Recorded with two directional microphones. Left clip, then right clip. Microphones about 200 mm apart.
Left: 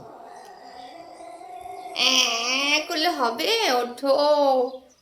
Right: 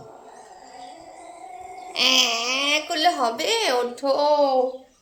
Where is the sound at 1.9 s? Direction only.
30° right (ahead or behind).